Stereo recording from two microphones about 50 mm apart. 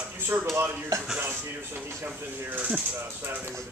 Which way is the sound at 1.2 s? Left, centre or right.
Right.